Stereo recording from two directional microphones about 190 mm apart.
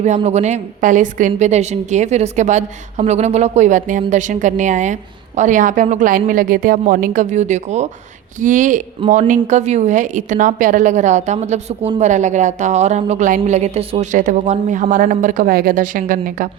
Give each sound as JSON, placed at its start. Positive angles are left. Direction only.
{"t": 0.0, "sound": "a woman's voice", "side_deg": -35}